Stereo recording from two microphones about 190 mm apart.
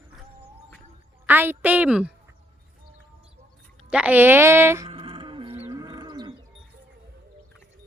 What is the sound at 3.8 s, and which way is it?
A woman's voice, 5° right (ahead or behind).